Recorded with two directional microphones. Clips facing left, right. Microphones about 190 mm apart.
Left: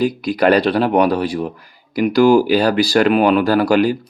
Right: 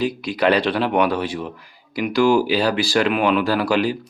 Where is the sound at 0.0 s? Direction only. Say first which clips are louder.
Left 4 dB; 40° left (ahead or behind).